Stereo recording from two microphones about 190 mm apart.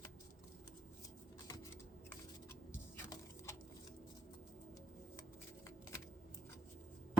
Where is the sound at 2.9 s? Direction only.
15° left (ahead or behind).